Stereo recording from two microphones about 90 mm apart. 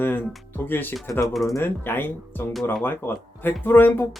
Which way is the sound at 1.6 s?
25° left (ahead or behind).